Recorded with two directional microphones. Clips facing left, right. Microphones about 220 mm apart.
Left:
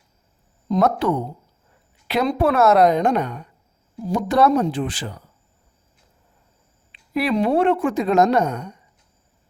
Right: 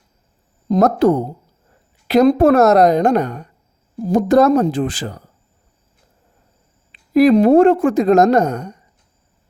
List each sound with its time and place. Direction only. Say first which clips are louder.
0.7 s a woman's voice: right 6 dB; 40° right (ahead or behind)
7.1 s a woman's voice: right 9 dB; 40° right (ahead or behind)